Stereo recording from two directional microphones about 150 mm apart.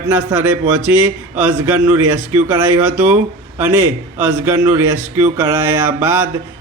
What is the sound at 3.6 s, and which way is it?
A man's voice, 10° right (ahead or behind).